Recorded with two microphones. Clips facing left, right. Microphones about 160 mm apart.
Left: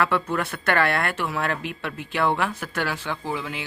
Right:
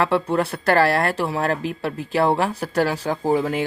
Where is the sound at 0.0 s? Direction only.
30° right (ahead or behind).